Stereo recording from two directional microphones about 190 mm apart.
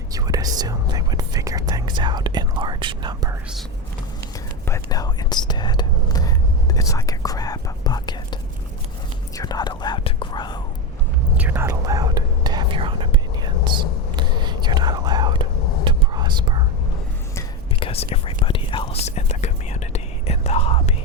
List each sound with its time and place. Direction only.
0.1 s whispering: 20° right (ahead or behind)
4.6 s whispering: 15° left (ahead or behind)
11.3 s whispering: 10° right (ahead or behind)
17.7 s whispering: 30° left (ahead or behind)